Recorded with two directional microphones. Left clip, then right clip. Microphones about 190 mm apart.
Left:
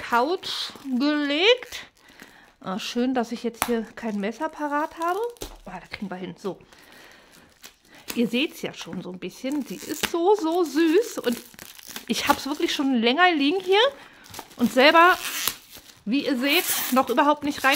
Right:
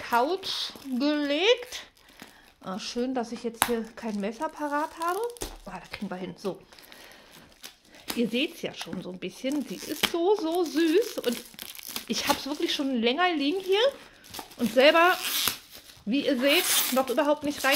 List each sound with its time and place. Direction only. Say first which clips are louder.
0.0 s speech: left 3 dB; 30° left (ahead or behind)
8.2 s speech: left 3 dB; 30° left (ahead or behind)
10.1 s speech: left 6 dB; 35° left (ahead or behind)
16.9 s speech: left 7 dB; 50° left (ahead or behind)